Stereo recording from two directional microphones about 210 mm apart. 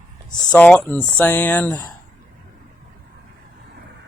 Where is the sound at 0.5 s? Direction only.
5° left (ahead or behind).